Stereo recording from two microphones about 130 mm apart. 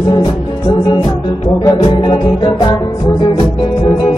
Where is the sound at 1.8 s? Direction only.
40° left (ahead or behind).